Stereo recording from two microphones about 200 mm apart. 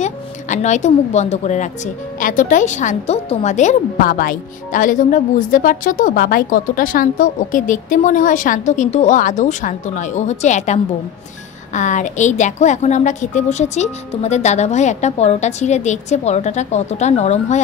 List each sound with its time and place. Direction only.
0.0 s a woman's voice: 35° left (ahead or behind)